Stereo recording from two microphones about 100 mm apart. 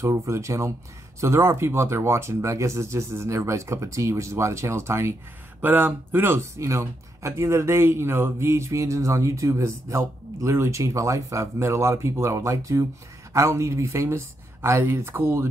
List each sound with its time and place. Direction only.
0.0 s speech: 30° right (ahead or behind)